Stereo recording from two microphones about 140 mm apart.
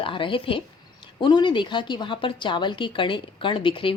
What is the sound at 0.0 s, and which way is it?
A woman's voice, 40° left (ahead or behind).